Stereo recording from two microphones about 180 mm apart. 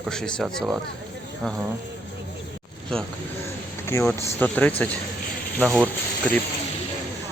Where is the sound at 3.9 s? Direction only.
15° left (ahead or behind).